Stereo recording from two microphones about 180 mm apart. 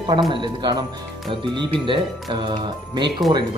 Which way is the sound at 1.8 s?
25° right (ahead or behind).